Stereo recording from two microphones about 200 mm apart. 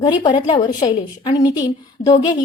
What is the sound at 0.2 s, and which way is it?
A woman's voice, 25° left (ahead or behind).